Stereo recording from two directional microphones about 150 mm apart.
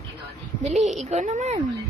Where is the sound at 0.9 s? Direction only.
50° right (ahead or behind).